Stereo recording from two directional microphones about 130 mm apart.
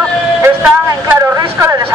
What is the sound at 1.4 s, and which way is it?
Speech, 20° right (ahead or behind).